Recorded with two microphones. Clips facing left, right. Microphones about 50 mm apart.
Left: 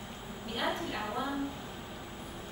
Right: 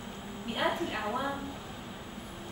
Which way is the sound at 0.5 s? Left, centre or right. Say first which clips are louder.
Right 3 dB; centre.